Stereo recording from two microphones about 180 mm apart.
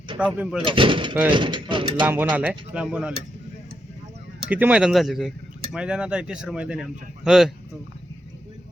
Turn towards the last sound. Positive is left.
turn(degrees=0)  # may be behind; listen again after turning